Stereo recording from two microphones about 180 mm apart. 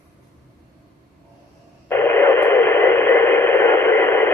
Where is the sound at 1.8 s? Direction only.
10° left (ahead or behind).